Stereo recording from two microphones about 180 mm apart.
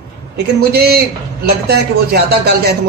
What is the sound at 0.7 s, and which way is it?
A man's voice, 60° right (ahead or behind).